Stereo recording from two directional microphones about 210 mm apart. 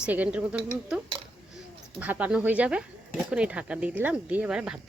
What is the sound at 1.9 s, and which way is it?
Speech, 5° right (ahead or behind).